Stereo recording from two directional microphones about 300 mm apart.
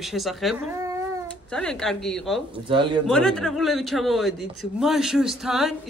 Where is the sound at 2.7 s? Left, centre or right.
Centre.